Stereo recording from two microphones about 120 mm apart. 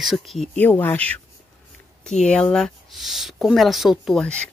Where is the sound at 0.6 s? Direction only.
15° left (ahead or behind); by 4.2 s centre (ahead or behind).